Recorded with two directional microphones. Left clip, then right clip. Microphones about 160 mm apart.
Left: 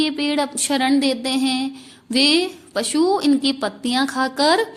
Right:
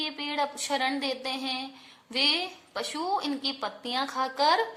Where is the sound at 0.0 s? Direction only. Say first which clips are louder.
Left 9 dB; 30° left (ahead or behind).